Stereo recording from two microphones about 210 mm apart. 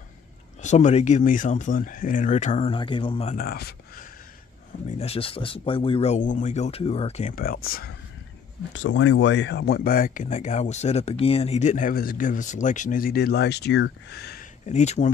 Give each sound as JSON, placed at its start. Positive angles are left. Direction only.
{"t": 0.6, "sound": "speech", "side_deg": 35}
{"t": 3.3, "sound": "speech", "side_deg": 45}
{"t": 4.9, "sound": "speech", "side_deg": 30}
{"t": 8.7, "sound": "speech", "side_deg": 70}
{"t": 14.7, "sound": "speech", "side_deg": 35}